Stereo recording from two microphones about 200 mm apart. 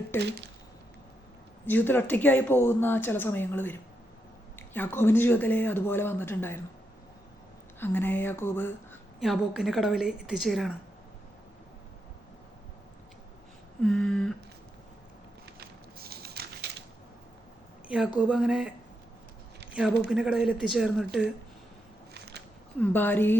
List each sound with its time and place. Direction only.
1.6 s speech: 10° left (ahead or behind)
7.8 s speech: 10° left (ahead or behind)
9.2 s a woman's voice: centre (ahead or behind)
13.8 s a woman's voice: centre (ahead or behind)
16.0 s a sound: 50° right (ahead or behind)
17.8 s a woman's voice: 5° right (ahead or behind)
20.1 s a woman's voice: 5° right (ahead or behind)
22.1 s a sound: 55° right (ahead or behind)
22.8 s speech: 10° left (ahead or behind)